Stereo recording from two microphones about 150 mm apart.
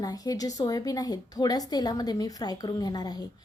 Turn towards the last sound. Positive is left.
turn(degrees=25)  # may be behind; listen again after turning